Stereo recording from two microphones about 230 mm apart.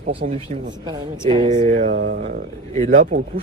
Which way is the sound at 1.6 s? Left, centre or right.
Right.